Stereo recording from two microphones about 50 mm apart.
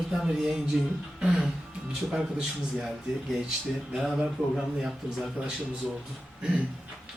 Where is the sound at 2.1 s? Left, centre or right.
Centre.